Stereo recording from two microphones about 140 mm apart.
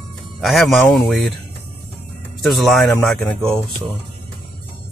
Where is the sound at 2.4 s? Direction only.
Centre (ahead or behind).